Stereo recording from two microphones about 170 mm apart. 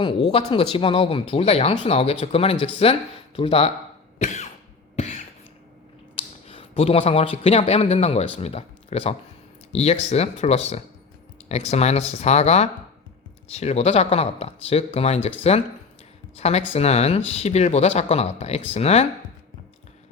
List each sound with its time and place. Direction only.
0.3 s speech: 35° left (ahead or behind)
4.2 s cough: 40° left (ahead or behind)
6.1 s speech: 35° left (ahead or behind)
16.4 s speech: 40° left (ahead or behind)